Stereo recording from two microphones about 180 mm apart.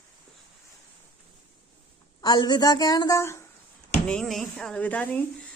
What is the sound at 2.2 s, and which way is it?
A woman's voice, 25° left (ahead or behind).